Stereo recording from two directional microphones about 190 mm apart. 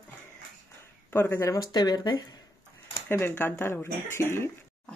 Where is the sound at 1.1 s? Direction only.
10° left (ahead or behind).